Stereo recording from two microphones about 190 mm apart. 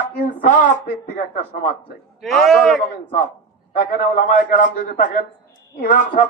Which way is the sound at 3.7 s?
45° left (ahead or behind).